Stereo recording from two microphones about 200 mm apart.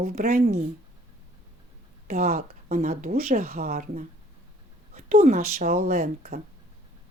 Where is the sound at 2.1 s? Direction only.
45° right (ahead or behind).